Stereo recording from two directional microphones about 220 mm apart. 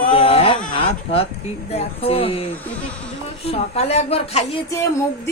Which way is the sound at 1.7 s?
25° left (ahead or behind).